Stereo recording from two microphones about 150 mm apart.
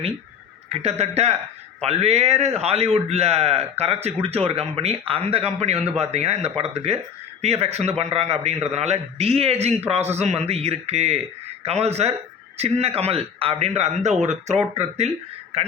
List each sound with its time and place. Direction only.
0.7 s a man's voice: 45° right (ahead or behind)